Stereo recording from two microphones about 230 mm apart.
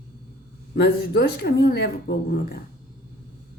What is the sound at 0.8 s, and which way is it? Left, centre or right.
Speech, left.